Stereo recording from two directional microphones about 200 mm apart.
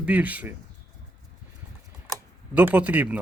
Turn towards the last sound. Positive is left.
turn(degrees=-5)  # may be behind; listen again after turning